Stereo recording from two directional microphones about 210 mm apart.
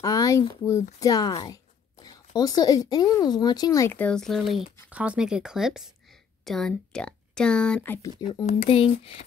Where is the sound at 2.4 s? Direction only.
15° left (ahead or behind).